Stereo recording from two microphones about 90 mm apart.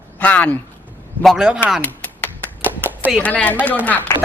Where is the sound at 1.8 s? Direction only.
15° left (ahead or behind).